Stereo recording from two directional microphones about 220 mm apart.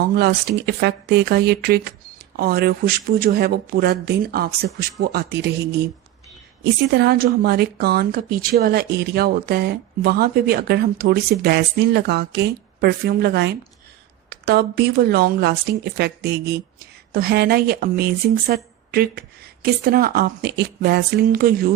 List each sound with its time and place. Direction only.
0.2 s speech: 45° right (ahead or behind)
6.6 s speech: 50° right (ahead or behind)